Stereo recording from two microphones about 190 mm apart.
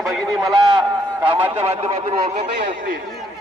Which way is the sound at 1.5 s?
35° right (ahead or behind).